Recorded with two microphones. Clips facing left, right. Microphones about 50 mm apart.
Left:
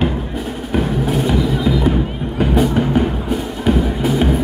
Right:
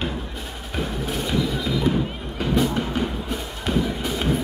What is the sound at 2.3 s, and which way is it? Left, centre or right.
Music, centre.